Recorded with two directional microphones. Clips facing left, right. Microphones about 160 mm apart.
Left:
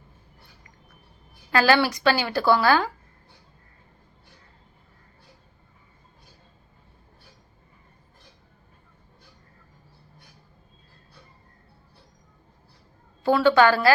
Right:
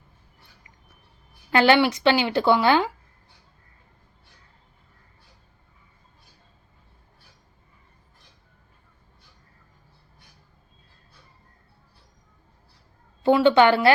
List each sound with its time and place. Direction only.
1.5 s a woman's voice: 20° right (ahead or behind)
13.2 s a woman's voice: 20° right (ahead or behind)